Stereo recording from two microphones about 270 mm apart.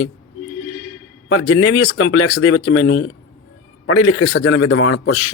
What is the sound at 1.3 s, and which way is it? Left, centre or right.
Speech, left.